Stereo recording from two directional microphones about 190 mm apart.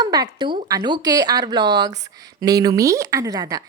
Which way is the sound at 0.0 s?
20° right (ahead or behind).